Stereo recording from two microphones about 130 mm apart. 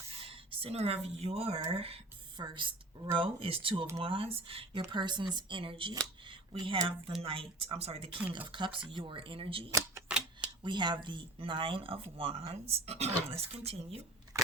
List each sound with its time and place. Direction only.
0.2 s speech: 45° right (ahead or behind)
2.4 s speech: 40° right (ahead or behind)
4.9 s speech: 35° right (ahead or behind)
10.1 s typewriter: 10° right (ahead or behind)
10.6 s speech: 35° right (ahead or behind); by 14.0 s 50° right (ahead or behind)